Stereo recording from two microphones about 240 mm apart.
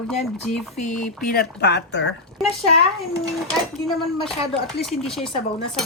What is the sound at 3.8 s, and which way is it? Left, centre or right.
Speech, centre.